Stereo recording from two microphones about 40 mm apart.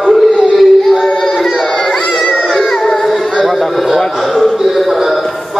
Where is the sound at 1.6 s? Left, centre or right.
Centre.